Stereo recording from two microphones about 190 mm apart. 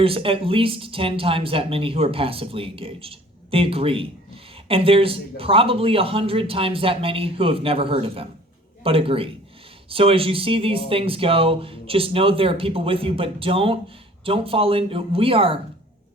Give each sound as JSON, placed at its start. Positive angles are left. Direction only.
{"t": 0.0, "sound": "speech", "side_deg": -30}